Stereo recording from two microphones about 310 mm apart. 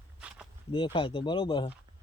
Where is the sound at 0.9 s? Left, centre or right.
Centre.